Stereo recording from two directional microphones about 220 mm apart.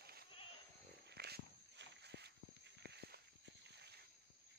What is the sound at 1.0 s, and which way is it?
Walk, 45° right (ahead or behind).